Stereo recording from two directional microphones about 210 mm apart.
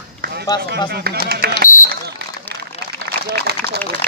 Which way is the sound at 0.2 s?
50° right (ahead or behind).